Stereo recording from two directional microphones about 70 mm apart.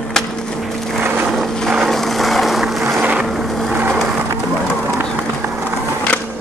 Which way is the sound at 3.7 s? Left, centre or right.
Right.